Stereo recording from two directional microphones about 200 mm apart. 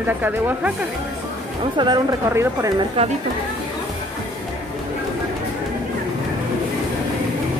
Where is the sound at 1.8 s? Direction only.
20° right (ahead or behind).